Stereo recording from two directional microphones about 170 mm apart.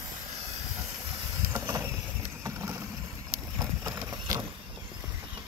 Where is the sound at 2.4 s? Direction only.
15° right (ahead or behind).